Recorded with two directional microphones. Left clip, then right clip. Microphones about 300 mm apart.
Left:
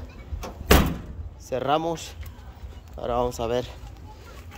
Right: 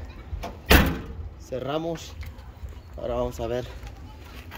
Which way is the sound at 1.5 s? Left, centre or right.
Centre.